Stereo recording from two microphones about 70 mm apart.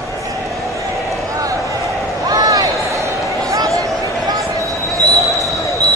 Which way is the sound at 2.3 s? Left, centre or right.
Right.